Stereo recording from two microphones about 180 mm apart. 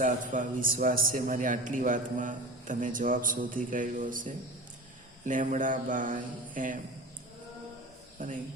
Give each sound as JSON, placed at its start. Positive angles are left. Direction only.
{"t": 0.0, "sound": "a man's voice", "side_deg": -45}
{"t": 8.2, "sound": "a man's voice", "side_deg": -45}